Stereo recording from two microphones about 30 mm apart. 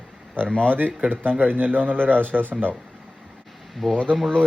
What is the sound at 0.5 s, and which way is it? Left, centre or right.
Speech, left.